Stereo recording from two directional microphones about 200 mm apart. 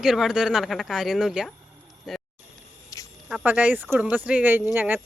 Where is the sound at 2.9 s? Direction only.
15° left (ahead or behind).